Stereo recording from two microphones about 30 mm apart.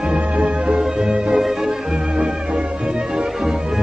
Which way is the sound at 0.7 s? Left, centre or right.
Right.